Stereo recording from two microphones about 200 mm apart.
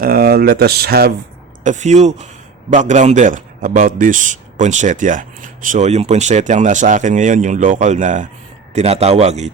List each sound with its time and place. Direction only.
0.0 s speech: 50° right (ahead or behind)
1.6 s a man's voice: 35° right (ahead or behind)